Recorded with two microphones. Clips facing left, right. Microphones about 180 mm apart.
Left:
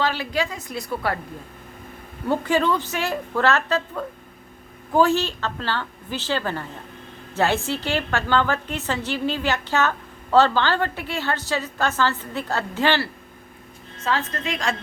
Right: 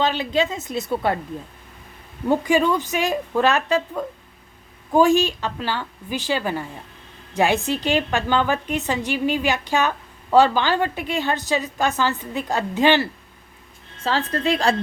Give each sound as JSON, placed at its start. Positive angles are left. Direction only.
{"t": 0.0, "sound": "a woman's voice", "side_deg": -20}
{"t": 2.2, "sound": "a woman's voice", "side_deg": -15}
{"t": 14.0, "sound": "a woman's voice", "side_deg": -30}